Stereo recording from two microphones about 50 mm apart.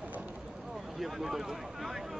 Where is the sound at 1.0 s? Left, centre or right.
Centre.